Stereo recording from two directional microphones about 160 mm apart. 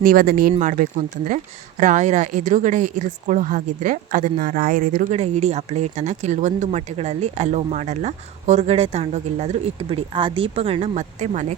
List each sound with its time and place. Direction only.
0.0 s speech: 60° right (ahead or behind)
0.6 s speech: 55° right (ahead or behind)
5.2 s speech: 45° right (ahead or behind)